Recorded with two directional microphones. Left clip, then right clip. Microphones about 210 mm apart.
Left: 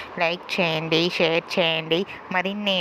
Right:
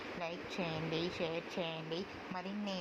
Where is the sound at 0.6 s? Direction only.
55° left (ahead or behind).